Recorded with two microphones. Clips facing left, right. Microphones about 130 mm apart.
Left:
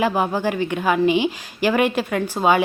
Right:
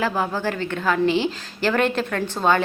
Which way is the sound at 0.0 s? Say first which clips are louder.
Left 3 dB; 15° left (ahead or behind).